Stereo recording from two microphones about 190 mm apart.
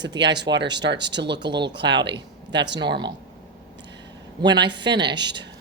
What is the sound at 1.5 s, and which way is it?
Speech, 25° right (ahead or behind).